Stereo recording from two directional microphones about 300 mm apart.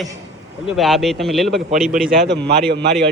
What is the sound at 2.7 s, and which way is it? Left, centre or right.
Speech, right.